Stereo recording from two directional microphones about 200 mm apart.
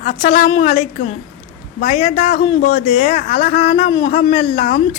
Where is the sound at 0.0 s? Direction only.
40° left (ahead or behind).